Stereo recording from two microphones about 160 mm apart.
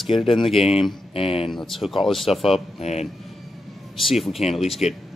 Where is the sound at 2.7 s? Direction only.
40° left (ahead or behind).